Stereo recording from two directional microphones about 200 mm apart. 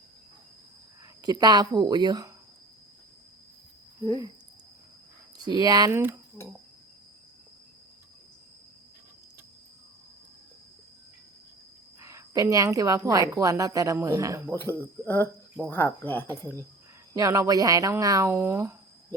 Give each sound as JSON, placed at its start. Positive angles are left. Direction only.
{"t": 1.2, "sound": "speech", "side_deg": -20}
{"t": 5.4, "sound": "speech", "side_deg": -20}
{"t": 6.4, "sound": "speech", "side_deg": 10}
{"t": 11.9, "sound": "a woman's voice", "side_deg": -15}
{"t": 14.5, "sound": "speech", "side_deg": 10}
{"t": 17.2, "sound": "a woman's voice", "side_deg": -15}